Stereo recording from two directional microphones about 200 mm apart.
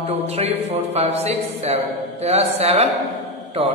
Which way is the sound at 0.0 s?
30° right (ahead or behind).